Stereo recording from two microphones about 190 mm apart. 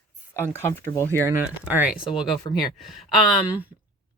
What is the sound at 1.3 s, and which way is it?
Speech, 10° right (ahead or behind).